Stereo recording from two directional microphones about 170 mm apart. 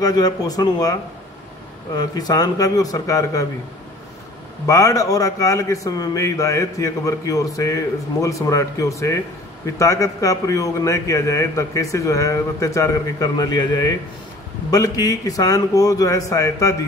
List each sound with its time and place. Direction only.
0.0 s a man's voice: 25° left (ahead or behind)
2.0 s a man's voice: 20° left (ahead or behind)
4.6 s a man's voice: 20° left (ahead or behind)